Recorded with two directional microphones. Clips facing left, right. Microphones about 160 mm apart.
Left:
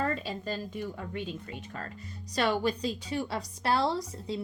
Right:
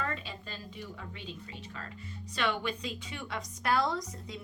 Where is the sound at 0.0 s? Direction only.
40° left (ahead or behind).